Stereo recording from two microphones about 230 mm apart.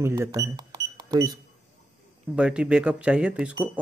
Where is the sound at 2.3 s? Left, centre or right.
Centre.